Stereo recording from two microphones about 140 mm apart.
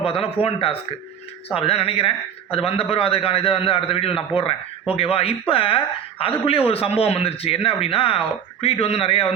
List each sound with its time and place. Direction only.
0.0 s speech: 40° left (ahead or behind)